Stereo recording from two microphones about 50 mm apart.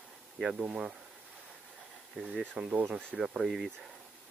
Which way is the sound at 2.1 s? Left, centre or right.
Centre.